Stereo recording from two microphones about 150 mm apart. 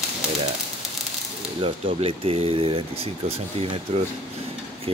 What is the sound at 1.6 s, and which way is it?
Speech, 40° right (ahead or behind).